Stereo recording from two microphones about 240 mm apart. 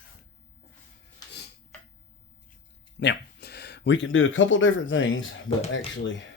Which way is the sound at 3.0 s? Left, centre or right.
Left.